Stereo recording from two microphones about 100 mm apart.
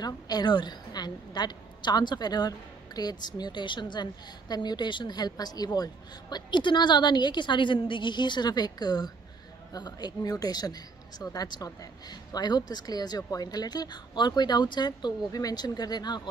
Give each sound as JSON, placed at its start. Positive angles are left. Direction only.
{"t": 0.0, "sound": "speech", "side_deg": 45}
{"t": 6.3, "sound": "speech", "side_deg": 50}